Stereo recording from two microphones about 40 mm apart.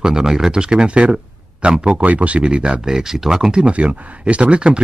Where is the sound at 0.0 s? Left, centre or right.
Centre; by 2.4 s right.